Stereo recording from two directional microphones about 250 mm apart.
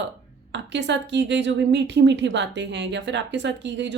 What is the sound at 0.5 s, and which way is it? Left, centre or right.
A woman's voice, right.